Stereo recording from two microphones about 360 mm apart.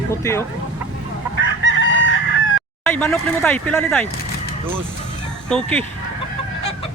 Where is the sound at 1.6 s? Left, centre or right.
Left.